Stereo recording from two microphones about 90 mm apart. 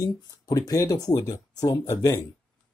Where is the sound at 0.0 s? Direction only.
40° left (ahead or behind).